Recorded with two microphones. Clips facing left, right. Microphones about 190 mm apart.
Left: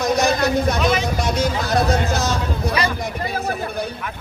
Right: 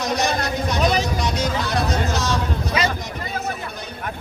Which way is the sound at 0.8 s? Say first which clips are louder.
Even; 40° right (ahead or behind).